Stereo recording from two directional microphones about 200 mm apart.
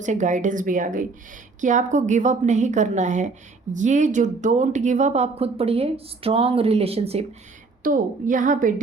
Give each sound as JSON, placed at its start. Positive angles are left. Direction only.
{"t": 0.0, "sound": "a woman's voice", "side_deg": -40}
{"t": 7.9, "sound": "a woman's voice", "side_deg": -40}